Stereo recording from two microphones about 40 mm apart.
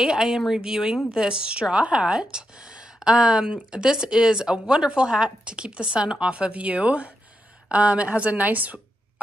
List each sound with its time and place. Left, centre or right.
0.0 s a woman's voice: centre; by 8.8 s right